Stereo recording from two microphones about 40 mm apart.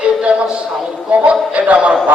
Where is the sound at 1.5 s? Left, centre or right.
Right.